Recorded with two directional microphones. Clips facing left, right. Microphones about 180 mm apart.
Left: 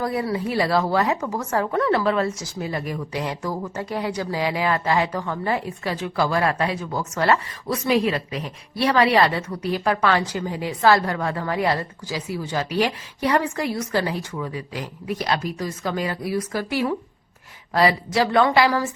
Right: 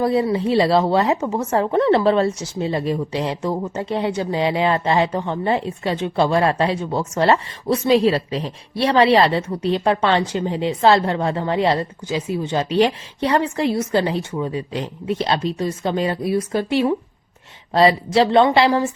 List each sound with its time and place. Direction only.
0.0 s a woman's voice: 25° right (ahead or behind)